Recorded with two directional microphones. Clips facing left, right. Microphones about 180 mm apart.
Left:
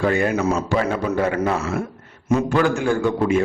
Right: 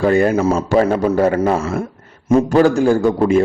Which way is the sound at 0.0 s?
35° right (ahead or behind).